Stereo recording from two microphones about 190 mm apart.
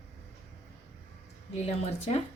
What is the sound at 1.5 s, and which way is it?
Speech, 35° left (ahead or behind).